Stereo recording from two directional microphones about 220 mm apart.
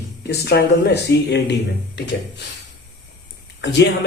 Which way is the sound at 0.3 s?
45° left (ahead or behind).